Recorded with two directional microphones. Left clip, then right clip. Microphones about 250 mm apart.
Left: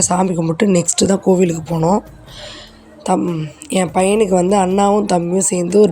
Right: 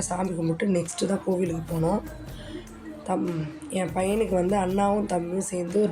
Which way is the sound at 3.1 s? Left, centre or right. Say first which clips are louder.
Left 11 dB; left.